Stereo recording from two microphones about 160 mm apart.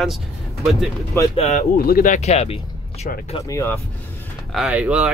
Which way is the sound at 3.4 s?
20° left (ahead or behind).